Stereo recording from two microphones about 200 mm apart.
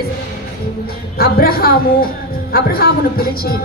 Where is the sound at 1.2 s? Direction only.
50° left (ahead or behind).